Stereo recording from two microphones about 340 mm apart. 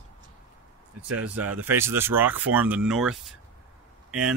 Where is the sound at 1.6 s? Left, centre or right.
Centre.